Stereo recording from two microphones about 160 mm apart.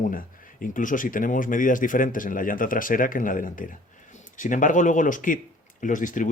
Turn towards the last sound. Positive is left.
turn(degrees=55)  # may be behind; listen again after turning